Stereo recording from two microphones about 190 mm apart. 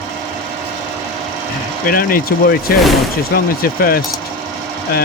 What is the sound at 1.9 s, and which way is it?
Speech, 50° left (ahead or behind).